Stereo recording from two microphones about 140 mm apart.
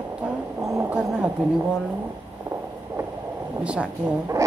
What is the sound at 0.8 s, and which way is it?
Speech, 5° right (ahead or behind).